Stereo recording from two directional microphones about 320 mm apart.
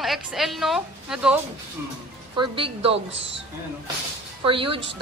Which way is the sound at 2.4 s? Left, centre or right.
Centre.